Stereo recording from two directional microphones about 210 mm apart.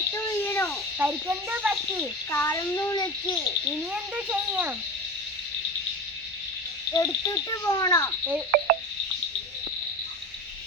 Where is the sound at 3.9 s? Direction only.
5° right (ahead or behind).